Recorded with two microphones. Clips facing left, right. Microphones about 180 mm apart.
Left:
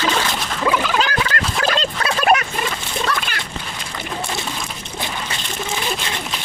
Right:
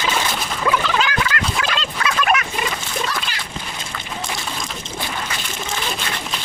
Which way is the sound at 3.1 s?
60° left (ahead or behind).